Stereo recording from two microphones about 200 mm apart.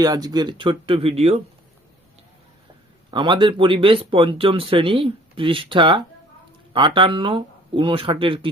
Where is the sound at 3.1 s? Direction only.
25° right (ahead or behind).